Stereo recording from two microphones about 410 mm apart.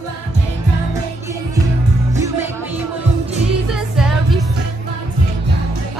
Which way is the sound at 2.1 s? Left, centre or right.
Centre.